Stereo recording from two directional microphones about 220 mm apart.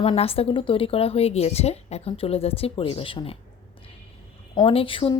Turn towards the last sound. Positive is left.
turn(degrees=25)  # may be behind; listen again after turning